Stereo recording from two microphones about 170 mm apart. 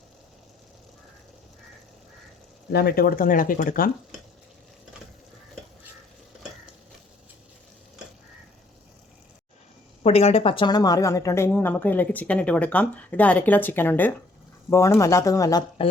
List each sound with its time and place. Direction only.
2.7 s speech: 65° left (ahead or behind)
10.0 s speech: 35° left (ahead or behind); by 15.6 s 20° left (ahead or behind)